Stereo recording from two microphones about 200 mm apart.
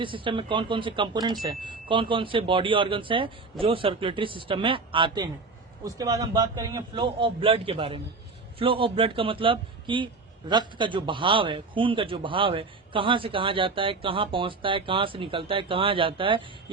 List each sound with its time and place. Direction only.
0.0 s a man's voice: 25° right (ahead or behind)